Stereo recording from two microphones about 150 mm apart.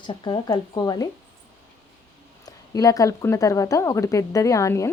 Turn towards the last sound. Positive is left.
turn(degrees=20)  # may be behind; listen again after turning